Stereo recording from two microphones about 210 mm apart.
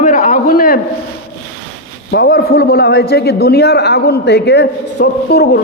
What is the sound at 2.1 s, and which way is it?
A man's voice, 50° left (ahead or behind).